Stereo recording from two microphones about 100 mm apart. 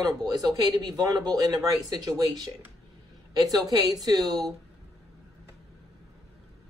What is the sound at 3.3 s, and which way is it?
Speech, 40° right (ahead or behind).